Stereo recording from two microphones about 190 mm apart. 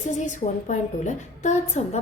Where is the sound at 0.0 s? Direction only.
40° left (ahead or behind).